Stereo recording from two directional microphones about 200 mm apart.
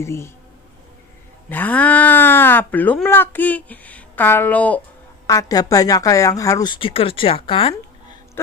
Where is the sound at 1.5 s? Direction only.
10° left (ahead or behind); by 7.7 s 30° left (ahead or behind).